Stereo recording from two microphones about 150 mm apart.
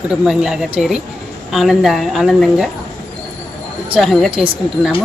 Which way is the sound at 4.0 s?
Centre (ahead or behind).